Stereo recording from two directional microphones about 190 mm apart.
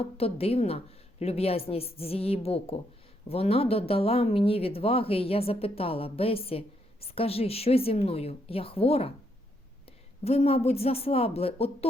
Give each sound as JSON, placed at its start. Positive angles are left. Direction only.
{"t": 0.0, "sound": "speech", "side_deg": 30}
{"t": 10.2, "sound": "speech", "side_deg": 35}